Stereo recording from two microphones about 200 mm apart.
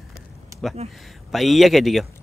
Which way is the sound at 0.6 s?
Centre (ahead or behind).